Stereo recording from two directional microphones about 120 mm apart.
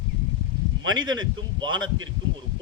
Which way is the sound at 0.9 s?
35° right (ahead or behind).